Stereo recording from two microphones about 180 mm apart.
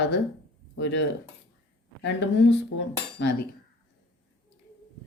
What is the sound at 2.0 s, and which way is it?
Cutlery, 90° left.